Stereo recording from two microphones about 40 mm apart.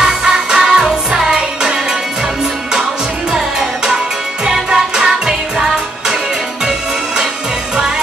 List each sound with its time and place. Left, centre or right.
0.0 s music: centre
3.3 s music: centre